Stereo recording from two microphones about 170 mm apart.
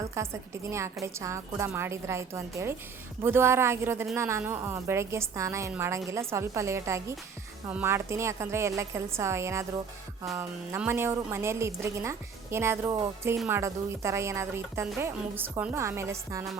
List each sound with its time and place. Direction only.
0.2 s a woman's voice: 15° right (ahead or behind)
10.8 s a woman's voice: 10° right (ahead or behind)